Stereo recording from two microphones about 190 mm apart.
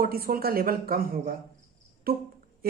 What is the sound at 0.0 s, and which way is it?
Speech, 50° right (ahead or behind).